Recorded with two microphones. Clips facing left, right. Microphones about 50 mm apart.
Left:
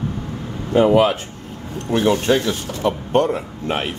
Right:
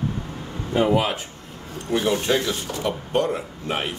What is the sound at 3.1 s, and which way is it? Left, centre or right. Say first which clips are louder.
Speech: left 4 dB; left.